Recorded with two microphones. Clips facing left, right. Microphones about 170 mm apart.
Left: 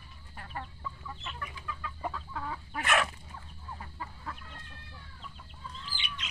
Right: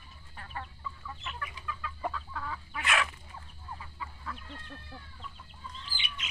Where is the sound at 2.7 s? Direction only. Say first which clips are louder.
Left 3 dB; 45° left (ahead or behind).